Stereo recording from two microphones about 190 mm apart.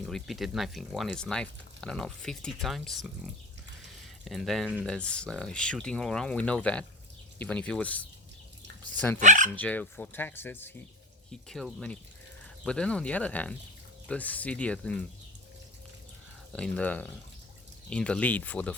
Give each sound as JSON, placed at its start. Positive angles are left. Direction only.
{"t": 0.0, "sound": "speech", "side_deg": 0}
{"t": 9.1, "sound": "speech", "side_deg": -40}
{"t": 9.6, "sound": "speech", "side_deg": 5}
{"t": 16.5, "sound": "speech", "side_deg": 5}